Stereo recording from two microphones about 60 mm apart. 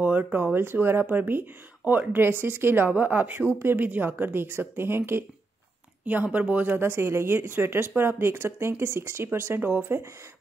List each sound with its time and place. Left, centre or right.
0.0 s a woman's voice: right
6.0 s speech: right